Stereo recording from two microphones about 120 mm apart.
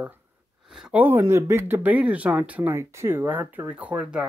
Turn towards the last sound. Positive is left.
turn(degrees=-10)  # may be behind; listen again after turning